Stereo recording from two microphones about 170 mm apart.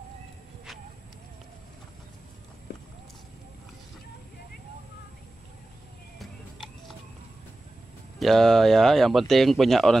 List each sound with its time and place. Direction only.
2.7 s clip-clop: 75° left (ahead or behind)
8.2 s speech: centre (ahead or behind)